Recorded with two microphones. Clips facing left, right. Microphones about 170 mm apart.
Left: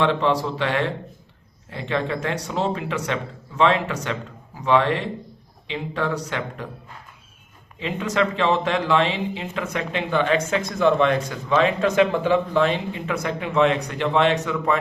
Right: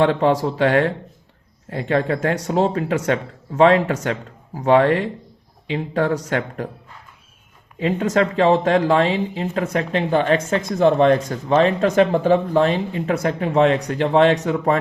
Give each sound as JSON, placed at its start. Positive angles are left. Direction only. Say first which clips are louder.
{"t": 0.0, "sound": "speech", "louder": "right 4 dB", "side_deg": -45}
{"t": 7.8, "sound": "speech", "louder": "right 5 dB", "side_deg": -45}